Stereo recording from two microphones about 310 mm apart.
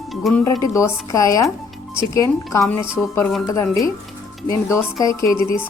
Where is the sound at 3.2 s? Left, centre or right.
Centre.